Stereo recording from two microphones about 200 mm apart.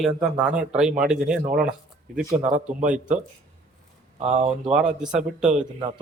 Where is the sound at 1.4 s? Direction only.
45° right (ahead or behind).